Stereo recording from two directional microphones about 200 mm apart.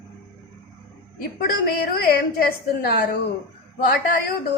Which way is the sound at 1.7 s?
50° left (ahead or behind).